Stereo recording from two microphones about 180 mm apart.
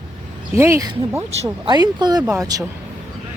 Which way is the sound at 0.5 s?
15° right (ahead or behind).